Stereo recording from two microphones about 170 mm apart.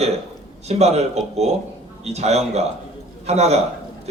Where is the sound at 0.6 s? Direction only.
40° right (ahead or behind).